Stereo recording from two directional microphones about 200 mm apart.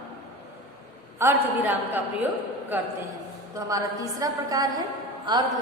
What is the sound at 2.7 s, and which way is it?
Speech, 10° right (ahead or behind).